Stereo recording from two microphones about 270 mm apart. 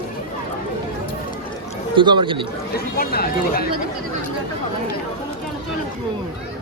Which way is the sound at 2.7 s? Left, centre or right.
Left.